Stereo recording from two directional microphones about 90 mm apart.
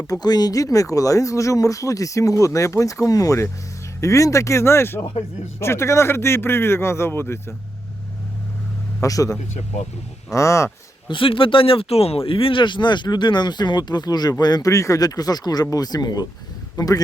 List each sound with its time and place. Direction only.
0.1 s speech: 50° left (ahead or behind); by 7.5 s 25° left (ahead or behind)
9.0 s a man's voice: 40° left (ahead or behind)
10.3 s speech: 35° left (ahead or behind)
11.1 s speech: 75° left (ahead or behind); by 14.7 s 50° left (ahead or behind)
14.7 s a man's voice: 35° left (ahead or behind)